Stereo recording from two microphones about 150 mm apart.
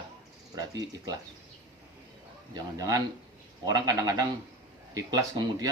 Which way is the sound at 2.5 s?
25° right (ahead or behind).